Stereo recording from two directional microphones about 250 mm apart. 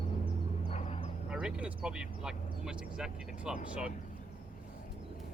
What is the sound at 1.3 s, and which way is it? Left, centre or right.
Speech, centre.